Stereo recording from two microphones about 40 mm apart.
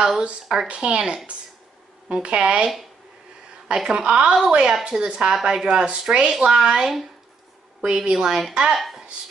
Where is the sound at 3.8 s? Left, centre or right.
Right.